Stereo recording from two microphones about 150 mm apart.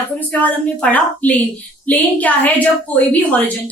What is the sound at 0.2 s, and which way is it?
Speech, 10° left (ahead or behind).